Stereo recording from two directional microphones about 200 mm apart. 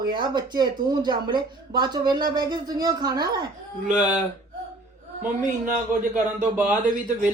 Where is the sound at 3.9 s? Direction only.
40° right (ahead or behind).